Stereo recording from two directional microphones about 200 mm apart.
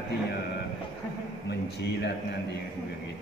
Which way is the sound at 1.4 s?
55° left (ahead or behind).